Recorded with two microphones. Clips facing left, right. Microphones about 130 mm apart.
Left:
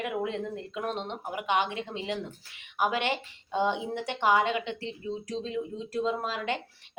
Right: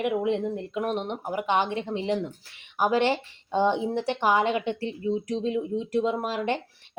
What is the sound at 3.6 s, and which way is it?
Speech, 20° right (ahead or behind).